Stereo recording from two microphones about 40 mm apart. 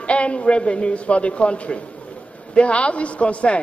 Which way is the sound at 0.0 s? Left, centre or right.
Left.